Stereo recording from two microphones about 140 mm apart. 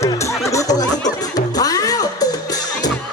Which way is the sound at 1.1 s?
25° left (ahead or behind).